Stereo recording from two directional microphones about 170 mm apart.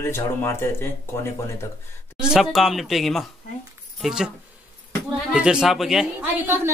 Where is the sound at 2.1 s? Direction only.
5° right (ahead or behind).